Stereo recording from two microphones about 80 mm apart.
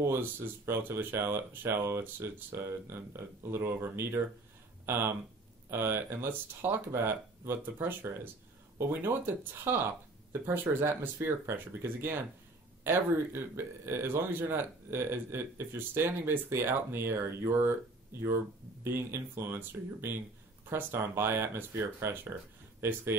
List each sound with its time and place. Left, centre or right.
0.0 s speech: right
18.9 s speech: right